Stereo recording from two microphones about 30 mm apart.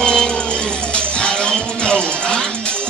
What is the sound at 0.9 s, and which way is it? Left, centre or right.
Music, left.